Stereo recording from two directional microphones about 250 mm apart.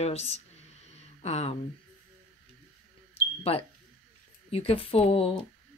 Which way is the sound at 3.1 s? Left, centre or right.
Left.